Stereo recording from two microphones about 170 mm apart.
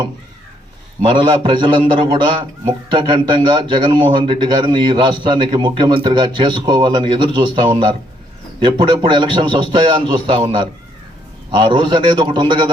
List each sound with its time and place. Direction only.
1.0 s a man's voice: 30° right (ahead or behind)